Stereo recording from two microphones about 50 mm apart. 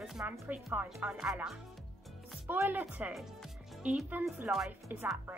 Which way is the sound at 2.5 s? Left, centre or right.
Right.